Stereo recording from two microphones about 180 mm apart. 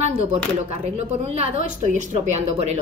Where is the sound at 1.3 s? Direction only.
40° right (ahead or behind).